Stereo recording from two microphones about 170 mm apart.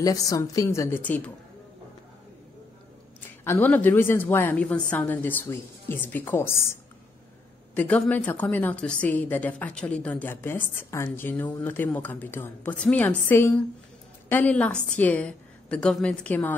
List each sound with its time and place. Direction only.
0.0 s speech: 20° left (ahead or behind)
3.2 s a woman's voice: 10° left (ahead or behind)